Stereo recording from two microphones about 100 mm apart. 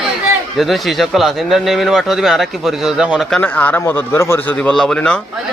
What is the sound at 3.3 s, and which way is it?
A man's voice, 15° left (ahead or behind).